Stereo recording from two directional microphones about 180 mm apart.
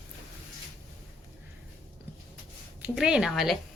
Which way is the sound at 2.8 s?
5° right (ahead or behind).